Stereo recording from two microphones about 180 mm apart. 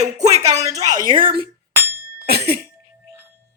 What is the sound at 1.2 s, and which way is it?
Speech, 55° right (ahead or behind).